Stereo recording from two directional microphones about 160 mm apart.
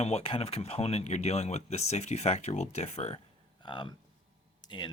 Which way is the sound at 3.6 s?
30° left (ahead or behind).